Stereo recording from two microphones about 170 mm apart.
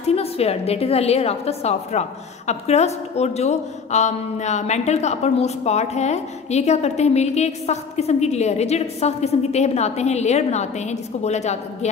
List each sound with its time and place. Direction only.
0.0 s a woman's voice: 35° left (ahead or behind)